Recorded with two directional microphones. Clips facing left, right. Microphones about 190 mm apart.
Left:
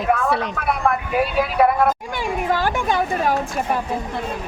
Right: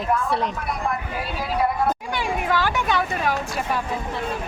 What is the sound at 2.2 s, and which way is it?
Speech, 45° left (ahead or behind).